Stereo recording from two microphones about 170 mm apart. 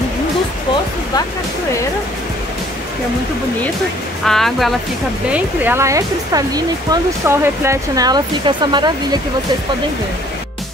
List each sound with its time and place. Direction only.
4.3 s speech: centre (ahead or behind)
5.3 s speech: 10° right (ahead or behind)